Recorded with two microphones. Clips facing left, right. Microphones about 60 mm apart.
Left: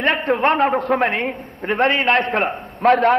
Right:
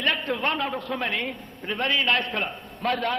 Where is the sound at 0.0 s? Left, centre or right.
Left.